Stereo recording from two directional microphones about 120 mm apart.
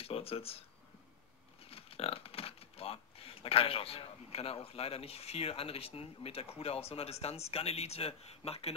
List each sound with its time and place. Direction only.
0.0 s speech: 55° left (ahead or behind)